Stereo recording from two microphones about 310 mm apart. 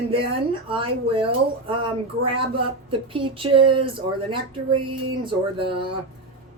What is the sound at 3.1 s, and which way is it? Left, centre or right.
Speech, centre.